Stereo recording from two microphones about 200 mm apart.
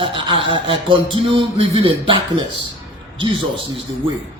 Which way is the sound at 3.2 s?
25° right (ahead or behind).